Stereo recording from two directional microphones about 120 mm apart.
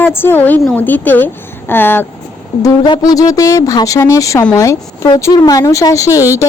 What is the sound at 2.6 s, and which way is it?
A woman's voice, 35° left (ahead or behind).